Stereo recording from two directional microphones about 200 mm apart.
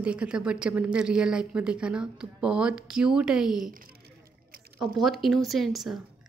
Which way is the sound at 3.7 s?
45° right (ahead or behind).